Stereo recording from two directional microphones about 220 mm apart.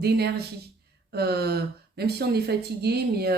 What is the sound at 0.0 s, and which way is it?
Speech, 45° right (ahead or behind).